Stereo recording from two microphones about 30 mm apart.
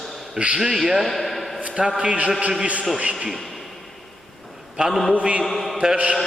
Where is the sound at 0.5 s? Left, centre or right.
Centre.